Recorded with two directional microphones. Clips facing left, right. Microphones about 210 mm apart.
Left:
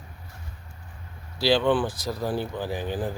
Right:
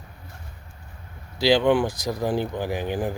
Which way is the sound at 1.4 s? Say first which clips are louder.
Right 3 dB; 15° right (ahead or behind).